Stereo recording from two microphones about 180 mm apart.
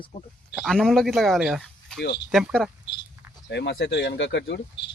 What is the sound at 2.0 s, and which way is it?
Speech, 70° left (ahead or behind).